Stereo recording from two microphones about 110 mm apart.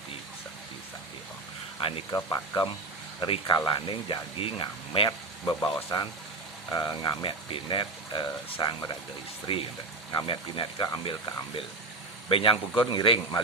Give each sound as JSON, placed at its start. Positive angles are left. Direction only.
{"t": 2.3, "sound": "speech", "side_deg": 35}
{"t": 3.2, "sound": "speech", "side_deg": 55}
{"t": 3.4, "sound": "speech", "side_deg": 45}
{"t": 12.3, "sound": "speech", "side_deg": 55}